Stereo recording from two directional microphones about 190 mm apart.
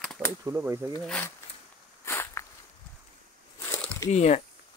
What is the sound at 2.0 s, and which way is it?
Walk, 15° left (ahead or behind).